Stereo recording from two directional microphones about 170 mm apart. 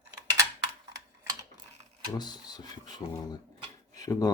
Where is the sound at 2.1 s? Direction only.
25° left (ahead or behind).